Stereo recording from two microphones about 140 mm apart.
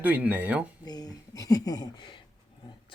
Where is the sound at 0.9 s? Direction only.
25° left (ahead or behind).